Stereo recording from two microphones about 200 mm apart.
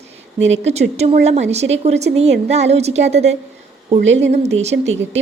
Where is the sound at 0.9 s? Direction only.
35° right (ahead or behind).